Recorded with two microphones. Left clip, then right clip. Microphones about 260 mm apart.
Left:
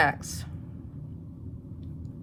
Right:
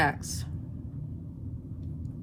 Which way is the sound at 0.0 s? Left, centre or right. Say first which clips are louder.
Left 3 dB; left.